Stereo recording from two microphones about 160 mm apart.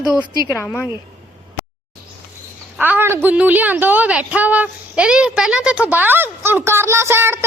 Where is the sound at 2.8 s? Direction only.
10° right (ahead or behind).